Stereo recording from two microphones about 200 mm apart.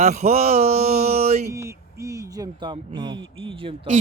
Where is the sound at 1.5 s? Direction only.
15° right (ahead or behind).